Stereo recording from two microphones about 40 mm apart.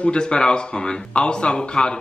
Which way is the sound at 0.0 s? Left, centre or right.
Left.